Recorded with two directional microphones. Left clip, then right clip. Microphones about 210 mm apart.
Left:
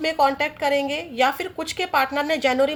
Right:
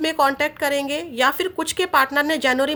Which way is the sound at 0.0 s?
35° right (ahead or behind).